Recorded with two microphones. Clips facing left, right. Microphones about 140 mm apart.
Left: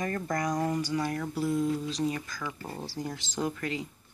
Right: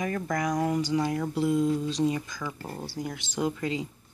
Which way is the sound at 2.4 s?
5° left (ahead or behind).